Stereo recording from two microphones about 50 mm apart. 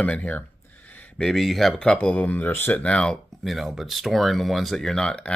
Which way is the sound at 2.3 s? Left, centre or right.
Left.